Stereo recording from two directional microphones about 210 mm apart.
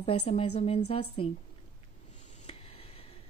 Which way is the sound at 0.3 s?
30° left (ahead or behind).